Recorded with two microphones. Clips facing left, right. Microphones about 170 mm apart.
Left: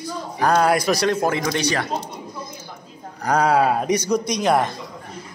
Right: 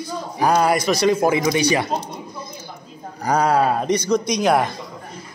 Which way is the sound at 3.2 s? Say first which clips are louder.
Even; 5° left (ahead or behind).